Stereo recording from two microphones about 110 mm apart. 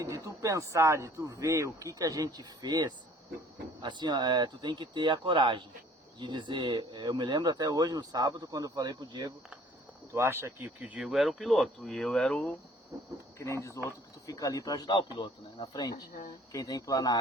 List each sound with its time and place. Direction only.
0.0 s speech: 30° right (ahead or behind)
10.1 s speech: 25° right (ahead or behind)
10.8 s speech: 10° right (ahead or behind)
11.1 s speech: centre (ahead or behind)
12.9 s speech: 30° right (ahead or behind)
13.8 s speech: 30° left (ahead or behind)